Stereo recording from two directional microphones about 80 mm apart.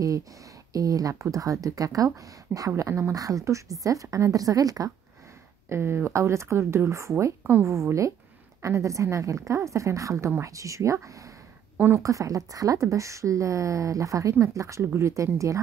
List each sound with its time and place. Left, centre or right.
0.7 s a woman's voice: right
2.8 s speech: right
3.2 s a woman's voice: right
5.7 s speech: right
11.7 s speech: right
12.0 s a woman's voice: right